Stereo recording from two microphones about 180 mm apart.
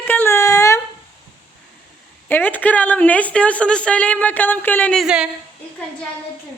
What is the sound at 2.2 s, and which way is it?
A woman's voice, 10° left (ahead or behind).